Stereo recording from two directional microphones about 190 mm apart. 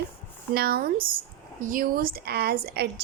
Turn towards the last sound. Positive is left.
turn(degrees=-55)  # may be behind; listen again after turning